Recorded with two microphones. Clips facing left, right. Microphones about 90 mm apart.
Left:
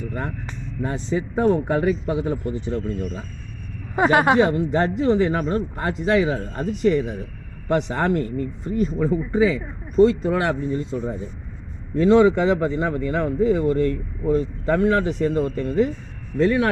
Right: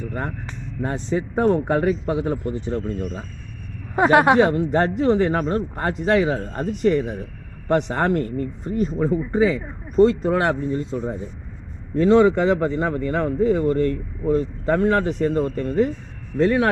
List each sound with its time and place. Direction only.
0.1 s speech: 40° right (ahead or behind)
0.8 s speech: 50° right (ahead or behind)